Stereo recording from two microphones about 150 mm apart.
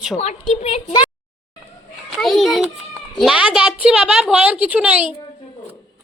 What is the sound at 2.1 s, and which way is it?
A woman's voice, centre (ahead or behind).